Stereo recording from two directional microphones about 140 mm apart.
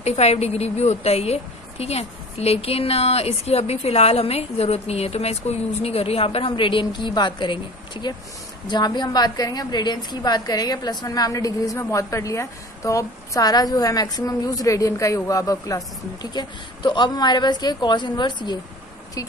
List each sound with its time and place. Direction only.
0.0 s a woman's voice: 50° left (ahead or behind); by 18.6 s 30° left (ahead or behind)